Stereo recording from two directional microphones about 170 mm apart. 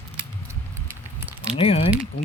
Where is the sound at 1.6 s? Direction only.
35° left (ahead or behind).